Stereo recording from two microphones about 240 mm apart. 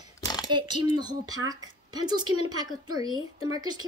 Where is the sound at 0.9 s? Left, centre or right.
Centre.